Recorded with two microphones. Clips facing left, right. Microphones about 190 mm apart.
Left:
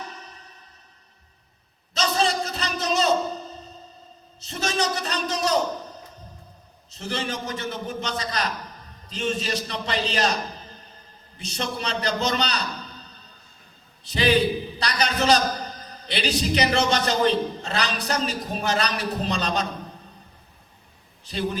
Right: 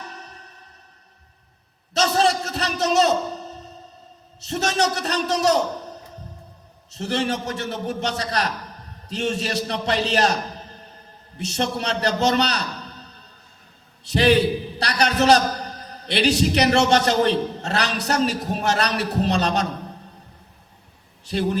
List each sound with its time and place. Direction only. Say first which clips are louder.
2.1 s a sound: right 2 dB; 65° right (ahead or behind)
4.4 s a man's voice: right 4 dB; 65° right (ahead or behind)
6.9 s a man's voice: right 6 dB; 65° right (ahead or behind)
11.3 s a man's voice: right 5 dB; 65° right (ahead or behind)
14.1 s a man's voice: right 3 dB; 60° right (ahead or behind)
21.2 s a man's voice: right 5 dB; 65° right (ahead or behind)